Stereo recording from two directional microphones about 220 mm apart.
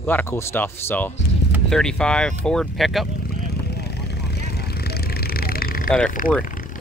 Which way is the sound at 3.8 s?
50° left (ahead or behind).